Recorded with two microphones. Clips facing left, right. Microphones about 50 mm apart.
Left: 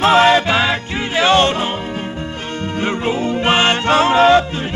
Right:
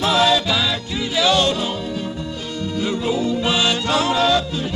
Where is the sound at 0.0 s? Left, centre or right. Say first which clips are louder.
Left 6 dB; left.